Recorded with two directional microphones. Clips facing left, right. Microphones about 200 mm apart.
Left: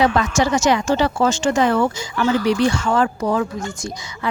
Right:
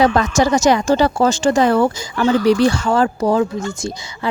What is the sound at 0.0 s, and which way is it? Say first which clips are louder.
Speech: right 3 dB; 40° right (ahead or behind).